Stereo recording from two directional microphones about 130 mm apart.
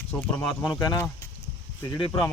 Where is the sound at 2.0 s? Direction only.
40° left (ahead or behind).